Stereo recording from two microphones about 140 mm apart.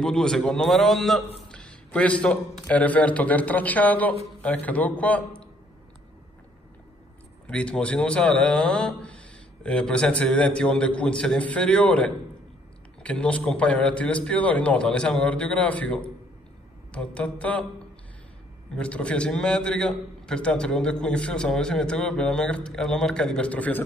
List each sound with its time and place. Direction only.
0.0 s speech: 5° left (ahead or behind)
7.4 s speech: 10° left (ahead or behind)
18.8 s a man's voice: 10° left (ahead or behind)